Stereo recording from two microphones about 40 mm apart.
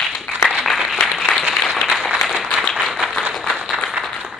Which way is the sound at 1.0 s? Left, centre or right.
Centre.